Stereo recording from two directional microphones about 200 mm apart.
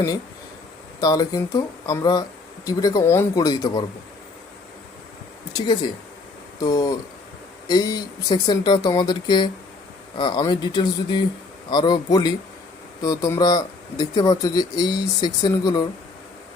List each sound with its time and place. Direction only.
1.0 s speech: 20° left (ahead or behind)
6.6 s speech: 15° left (ahead or behind)